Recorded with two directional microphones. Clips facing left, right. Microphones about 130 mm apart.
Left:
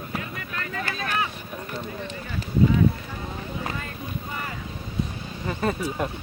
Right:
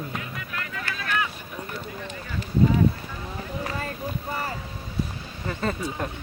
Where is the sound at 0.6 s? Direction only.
35° left (ahead or behind).